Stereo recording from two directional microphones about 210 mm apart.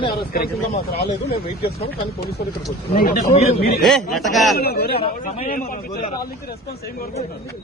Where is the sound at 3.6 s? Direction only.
45° left (ahead or behind).